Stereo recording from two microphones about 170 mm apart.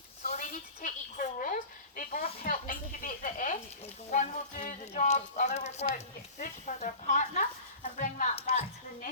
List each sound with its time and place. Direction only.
0.3 s a woman's voice: 45° left (ahead or behind)